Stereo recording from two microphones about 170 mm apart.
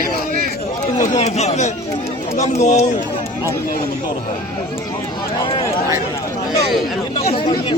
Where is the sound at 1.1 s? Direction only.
40° left (ahead or behind).